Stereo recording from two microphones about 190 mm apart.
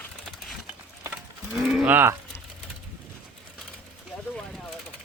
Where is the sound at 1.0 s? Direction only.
5° right (ahead or behind).